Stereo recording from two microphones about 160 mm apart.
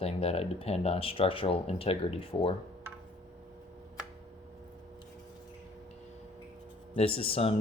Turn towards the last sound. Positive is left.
turn(degrees=35)  # may be behind; listen again after turning